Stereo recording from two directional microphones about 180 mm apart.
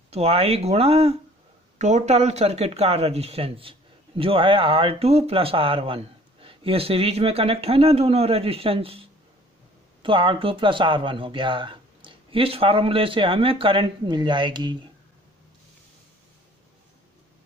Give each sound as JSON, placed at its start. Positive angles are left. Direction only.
{"t": 0.1, "sound": "speech", "side_deg": -35}
{"t": 10.0, "sound": "speech", "side_deg": -30}